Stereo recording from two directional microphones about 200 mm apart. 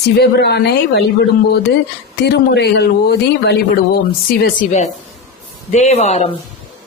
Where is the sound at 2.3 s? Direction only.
55° left (ahead or behind).